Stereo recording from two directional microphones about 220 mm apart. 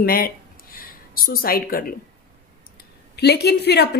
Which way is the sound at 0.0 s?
40° left (ahead or behind).